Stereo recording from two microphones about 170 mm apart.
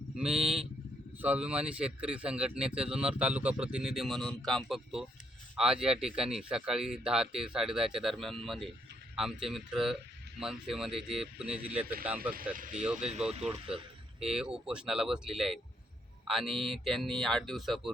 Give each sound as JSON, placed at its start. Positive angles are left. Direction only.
{"t": 0.2, "sound": "speech", "side_deg": -5}
{"t": 12.5, "sound": "speech", "side_deg": -50}
{"t": 12.8, "sound": "speech", "side_deg": -5}
{"t": 14.2, "sound": "speech", "side_deg": -5}